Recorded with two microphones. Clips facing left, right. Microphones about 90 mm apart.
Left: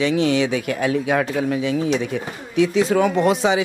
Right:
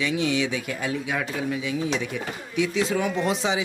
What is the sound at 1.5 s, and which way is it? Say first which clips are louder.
Speech: left 6 dB; 55° left (ahead or behind).